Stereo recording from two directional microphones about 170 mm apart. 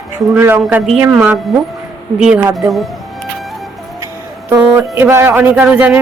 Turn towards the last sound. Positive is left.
turn(degrees=-5)  # may be behind; listen again after turning